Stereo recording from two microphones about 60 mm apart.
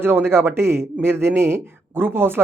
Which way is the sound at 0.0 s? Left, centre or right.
Right.